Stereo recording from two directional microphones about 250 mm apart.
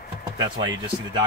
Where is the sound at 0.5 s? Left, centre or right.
Centre.